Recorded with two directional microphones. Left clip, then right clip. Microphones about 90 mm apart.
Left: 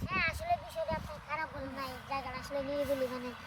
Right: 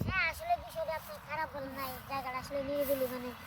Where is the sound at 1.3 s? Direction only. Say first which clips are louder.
Even; 5° right (ahead or behind).